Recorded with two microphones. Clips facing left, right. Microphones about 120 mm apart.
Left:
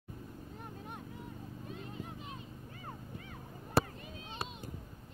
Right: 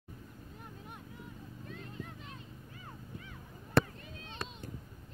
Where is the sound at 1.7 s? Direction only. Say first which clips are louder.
Even; 15° left (ahead or behind).